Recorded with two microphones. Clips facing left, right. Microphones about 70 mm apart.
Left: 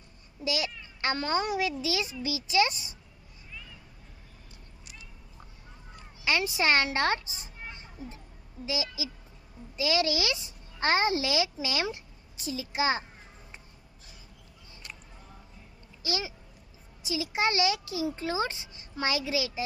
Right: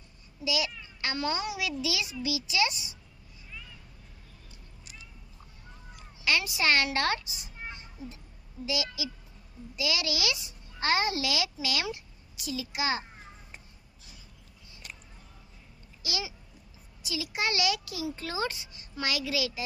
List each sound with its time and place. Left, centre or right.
0.4 s a child's voice: left
6.2 s a child's voice: left
8.6 s a child's voice: left
16.0 s a child's voice: left